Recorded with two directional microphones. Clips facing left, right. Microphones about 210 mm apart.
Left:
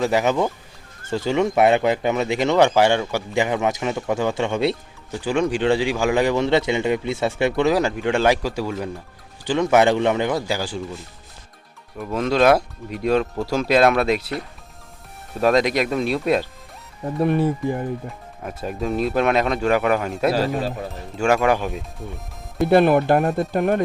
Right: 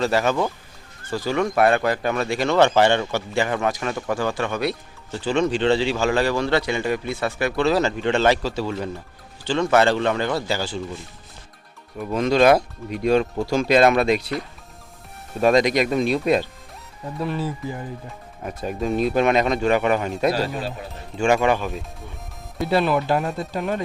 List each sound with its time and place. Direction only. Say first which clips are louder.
0.0 s a man's voice: left 1 dB; 15° left (ahead or behind)
5.1 s a man's voice: even; 10° left (ahead or behind)
11.9 s speech: right 1 dB; centre (ahead or behind)
17.2 s speech: left 7 dB; 55° left (ahead or behind)
18.4 s speech: right 1 dB; centre (ahead or behind)
20.3 s speech: left 3 dB; 40° left (ahead or behind)
21.2 s speech: even; 5° left (ahead or behind)
22.6 s speech: left 5 dB; 55° left (ahead or behind)